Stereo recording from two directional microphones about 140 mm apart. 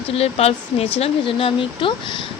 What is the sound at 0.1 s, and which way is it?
Speech, 45° left (ahead or behind).